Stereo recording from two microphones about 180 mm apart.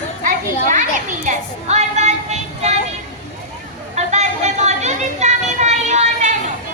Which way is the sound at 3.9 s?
40° right (ahead or behind).